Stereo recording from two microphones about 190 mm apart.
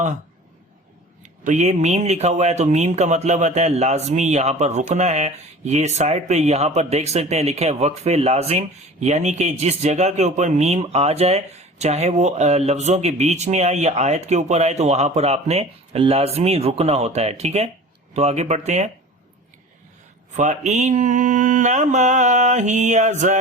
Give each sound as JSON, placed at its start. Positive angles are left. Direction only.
{"t": 1.5, "sound": "speech", "side_deg": -40}
{"t": 20.3, "sound": "speech", "side_deg": -40}